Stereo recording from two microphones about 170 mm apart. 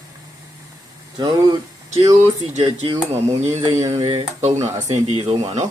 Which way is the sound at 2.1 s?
40° right (ahead or behind).